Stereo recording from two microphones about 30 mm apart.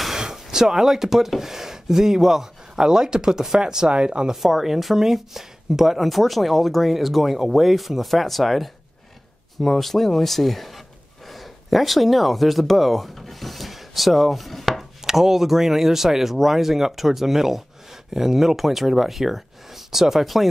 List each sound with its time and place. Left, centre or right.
0.1 s a sound: centre
1.4 s speech: centre; by 4.3 s right
4.3 s speech: centre
6.0 s speech: centre
11.2 s a sound: centre
15.0 s speech: centre